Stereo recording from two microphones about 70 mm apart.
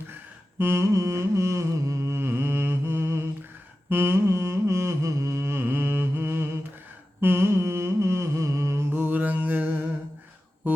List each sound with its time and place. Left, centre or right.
0.6 s carnatic music: right
3.8 s a sound: right
7.2 s humming: right
8.9 s mantra: right
10.6 s music: right